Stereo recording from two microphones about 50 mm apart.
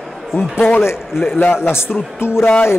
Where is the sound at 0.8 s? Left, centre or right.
Left.